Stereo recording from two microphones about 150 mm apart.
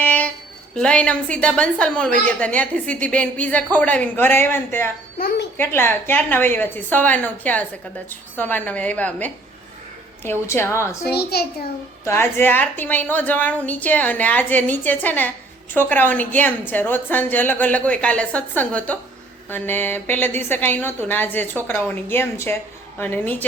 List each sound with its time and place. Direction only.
0.0 s a sound: 10° left (ahead or behind)
0.8 s a woman's voice: 5° left (ahead or behind)
11.0 s a child's voice: 90° left
12.0 s a woman's voice: 15° left (ahead or behind)